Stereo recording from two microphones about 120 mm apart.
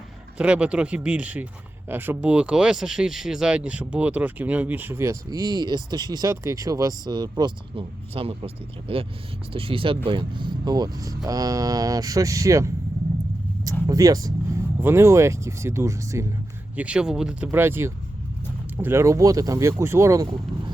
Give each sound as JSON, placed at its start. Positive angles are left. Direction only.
{"t": 0.3, "sound": "speech", "side_deg": -10}
{"t": 13.8, "sound": "speech", "side_deg": -30}
{"t": 16.7, "sound": "speech", "side_deg": -10}
{"t": 17.5, "sound": "speech", "side_deg": -20}